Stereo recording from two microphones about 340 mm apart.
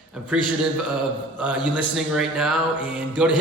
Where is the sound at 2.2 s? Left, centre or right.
Centre.